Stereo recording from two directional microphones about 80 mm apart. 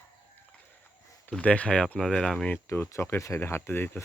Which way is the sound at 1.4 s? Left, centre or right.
Centre.